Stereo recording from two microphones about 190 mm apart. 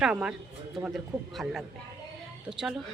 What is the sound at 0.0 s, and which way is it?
Speech, 5° right (ahead or behind).